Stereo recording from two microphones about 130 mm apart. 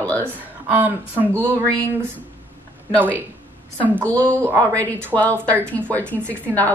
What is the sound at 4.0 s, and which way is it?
Speech, 10° left (ahead or behind).